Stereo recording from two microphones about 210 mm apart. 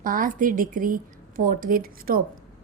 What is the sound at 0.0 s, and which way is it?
A woman's voice, 40° right (ahead or behind).